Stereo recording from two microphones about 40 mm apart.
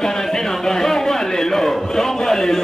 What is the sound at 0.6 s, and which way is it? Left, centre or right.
A man's voice, centre.